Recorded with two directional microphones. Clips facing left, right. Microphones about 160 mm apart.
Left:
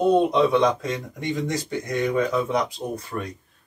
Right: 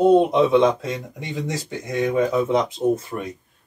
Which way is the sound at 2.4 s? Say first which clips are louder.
Right 4 dB; 25° right (ahead or behind).